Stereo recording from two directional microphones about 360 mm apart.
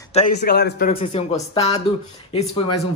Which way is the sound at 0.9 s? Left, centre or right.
Centre.